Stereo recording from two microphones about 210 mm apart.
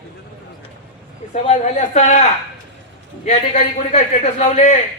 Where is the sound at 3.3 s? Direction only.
35° left (ahead or behind).